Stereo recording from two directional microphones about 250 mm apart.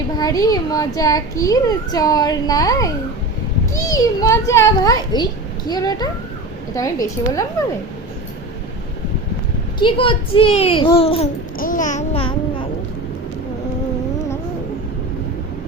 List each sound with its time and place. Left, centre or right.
0.2 s a child's voice: centre
9.7 s a child's voice: centre